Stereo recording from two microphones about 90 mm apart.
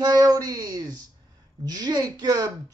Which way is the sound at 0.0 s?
45° right (ahead or behind).